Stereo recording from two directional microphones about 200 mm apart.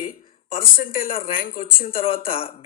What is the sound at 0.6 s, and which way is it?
A man's voice, 45° left (ahead or behind).